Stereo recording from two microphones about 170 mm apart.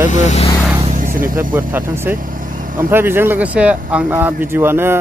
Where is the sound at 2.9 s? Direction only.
15° right (ahead or behind).